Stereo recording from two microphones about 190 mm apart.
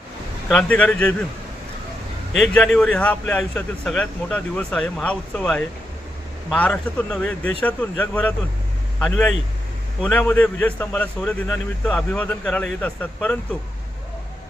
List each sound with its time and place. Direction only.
0.4 s speech: 5° left (ahead or behind)
2.3 s a man's voice: 5° left (ahead or behind)